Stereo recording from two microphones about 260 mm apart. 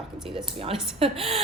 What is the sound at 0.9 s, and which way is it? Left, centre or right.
Speech, right.